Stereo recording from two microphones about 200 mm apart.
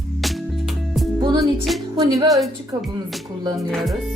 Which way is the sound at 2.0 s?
20° right (ahead or behind).